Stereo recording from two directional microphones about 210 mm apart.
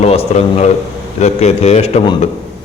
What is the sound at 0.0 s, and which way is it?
A man's voice, 30° left (ahead or behind).